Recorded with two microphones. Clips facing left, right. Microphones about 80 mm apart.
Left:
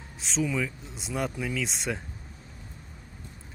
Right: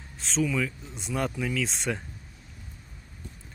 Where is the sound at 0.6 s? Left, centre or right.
Centre.